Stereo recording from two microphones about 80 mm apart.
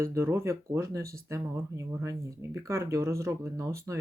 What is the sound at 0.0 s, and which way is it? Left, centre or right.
Speech, right.